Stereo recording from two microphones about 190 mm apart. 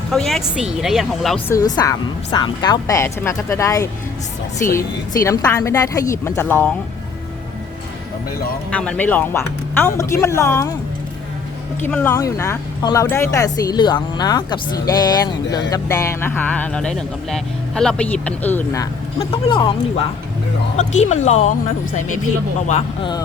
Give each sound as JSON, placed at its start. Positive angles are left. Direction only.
{"t": 0.1, "sound": "speech", "side_deg": 0}
{"t": 1.5, "sound": "speech", "side_deg": 20}
{"t": 8.7, "sound": "speech", "side_deg": 5}
{"t": 11.8, "sound": "speech", "side_deg": 10}
{"t": 19.2, "sound": "speech", "side_deg": 30}
{"t": 20.7, "sound": "speech", "side_deg": 35}